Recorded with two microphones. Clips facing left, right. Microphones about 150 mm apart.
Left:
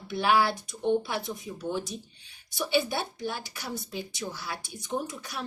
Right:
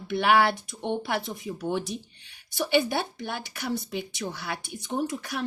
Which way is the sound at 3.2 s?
60° right (ahead or behind).